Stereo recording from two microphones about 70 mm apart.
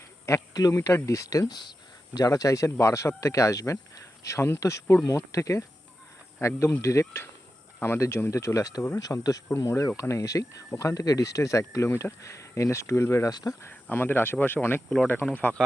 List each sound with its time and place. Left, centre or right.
0.5 s speech: left
0.8 s speech: left
2.1 s speech: left
9.0 s speech: left
9.6 s speech: left
13.3 s speech: left
13.8 s speech: left